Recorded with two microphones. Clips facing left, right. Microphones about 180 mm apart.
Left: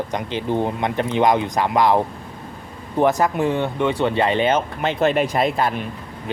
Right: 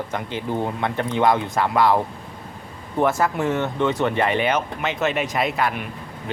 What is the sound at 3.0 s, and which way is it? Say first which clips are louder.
Speech: left 3 dB; 15° left (ahead or behind).